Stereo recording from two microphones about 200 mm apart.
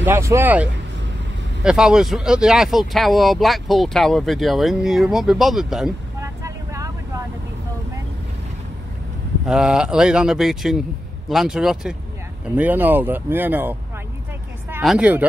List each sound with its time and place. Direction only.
0.0 s speech: 15° right (ahead or behind)
6.2 s vehicle: 15° right (ahead or behind)
9.5 s speech: 5° right (ahead or behind)
14.8 s speech: 5° right (ahead or behind)